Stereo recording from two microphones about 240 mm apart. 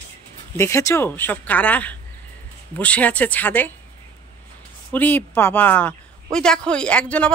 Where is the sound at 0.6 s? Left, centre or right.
Centre.